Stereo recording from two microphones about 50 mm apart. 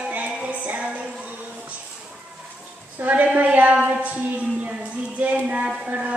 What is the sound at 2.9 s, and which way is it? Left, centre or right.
A woman's voice, right.